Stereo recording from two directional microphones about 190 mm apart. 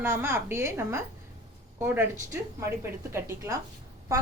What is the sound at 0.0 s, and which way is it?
A woman's voice, 15° right (ahead or behind).